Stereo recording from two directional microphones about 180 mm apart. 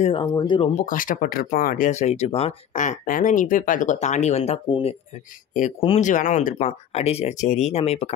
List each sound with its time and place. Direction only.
0.0 s speech: 30° left (ahead or behind)
0.7 s speech: 45° left (ahead or behind)
4.6 s speech: 25° left (ahead or behind)